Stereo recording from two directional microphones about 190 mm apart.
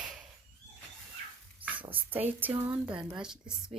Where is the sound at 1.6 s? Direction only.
10° right (ahead or behind).